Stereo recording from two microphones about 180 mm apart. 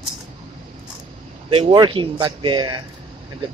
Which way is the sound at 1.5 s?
30° right (ahead or behind).